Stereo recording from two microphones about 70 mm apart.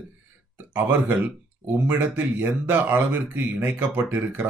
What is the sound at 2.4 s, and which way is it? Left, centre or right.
Speech, right.